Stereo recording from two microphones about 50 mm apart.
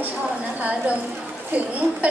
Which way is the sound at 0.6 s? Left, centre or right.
Right.